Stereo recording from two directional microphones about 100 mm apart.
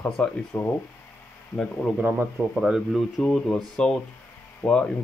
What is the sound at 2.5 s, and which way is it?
Speech, 5° right (ahead or behind).